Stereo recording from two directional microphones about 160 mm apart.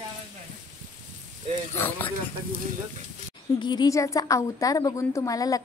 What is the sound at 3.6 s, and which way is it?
A woman's voice, 25° left (ahead or behind).